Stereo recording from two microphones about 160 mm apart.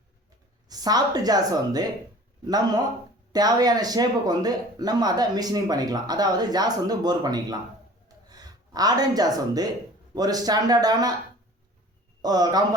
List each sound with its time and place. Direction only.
0.7 s speech: 25° right (ahead or behind)
8.0 s a sound: 25° right (ahead or behind)
10.2 s speech: 25° right (ahead or behind)
12.2 s speech: 25° right (ahead or behind)